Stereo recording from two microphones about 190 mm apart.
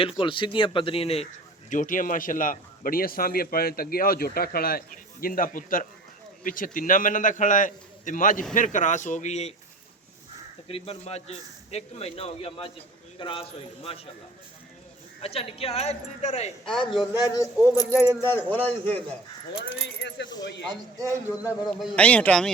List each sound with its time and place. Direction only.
0.2 s speech: 25° left (ahead or behind)
1.7 s a man's voice: 45° left (ahead or behind)
10.7 s a man's voice: 30° left (ahead or behind)
15.2 s speech: 30° left (ahead or behind)
16.6 s a man's voice: centre (ahead or behind)
17.0 s speech: 20° left (ahead or behind)
20.0 s speech: 65° left (ahead or behind)
20.7 s speech: 15° right (ahead or behind)
21.8 s speech: 5° left (ahead or behind)